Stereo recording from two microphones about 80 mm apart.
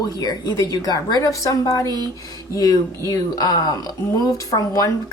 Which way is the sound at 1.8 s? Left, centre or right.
Right.